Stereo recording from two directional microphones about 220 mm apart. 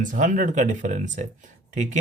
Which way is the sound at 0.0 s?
35° right (ahead or behind).